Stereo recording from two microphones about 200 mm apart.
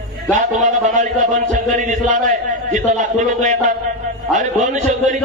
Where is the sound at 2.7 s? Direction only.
40° right (ahead or behind).